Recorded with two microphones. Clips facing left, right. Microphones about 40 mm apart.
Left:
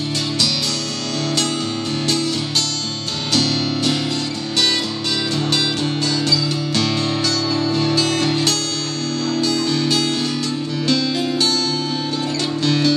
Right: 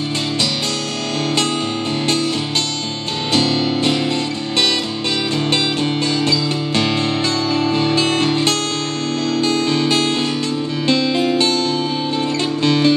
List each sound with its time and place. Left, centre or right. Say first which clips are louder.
6.2 s music: right 2 dB; right
12.6 s music: right 3 dB; right